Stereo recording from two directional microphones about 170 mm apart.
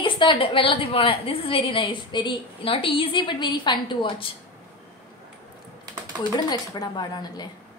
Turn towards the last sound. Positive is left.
turn(degrees=25)  # may be behind; listen again after turning